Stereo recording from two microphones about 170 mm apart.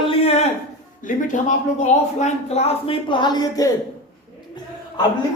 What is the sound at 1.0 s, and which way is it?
Speech, 45° left (ahead or behind).